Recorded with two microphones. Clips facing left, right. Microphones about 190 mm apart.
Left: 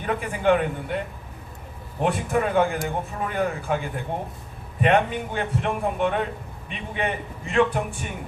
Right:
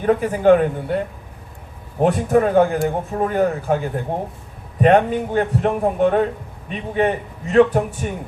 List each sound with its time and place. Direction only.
0.0 s a man's voice: 40° right (ahead or behind)
2.0 s a man's voice: 40° right (ahead or behind)